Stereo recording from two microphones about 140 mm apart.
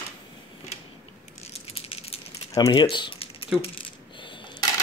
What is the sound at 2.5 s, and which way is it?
Speech, 30° left (ahead or behind).